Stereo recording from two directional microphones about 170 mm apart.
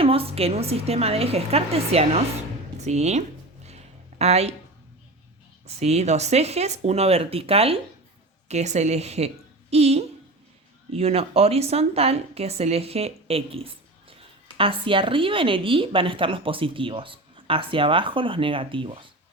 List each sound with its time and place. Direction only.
0.0 s speech: 35° right (ahead or behind)
5.6 s a woman's voice: 40° right (ahead or behind)